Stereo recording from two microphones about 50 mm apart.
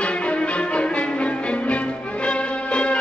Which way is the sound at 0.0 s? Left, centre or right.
Left.